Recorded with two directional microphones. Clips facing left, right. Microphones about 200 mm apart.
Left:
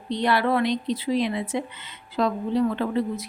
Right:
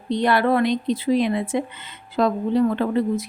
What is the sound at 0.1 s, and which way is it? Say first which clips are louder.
A woman's voice: right 3 dB; 50° right (ahead or behind).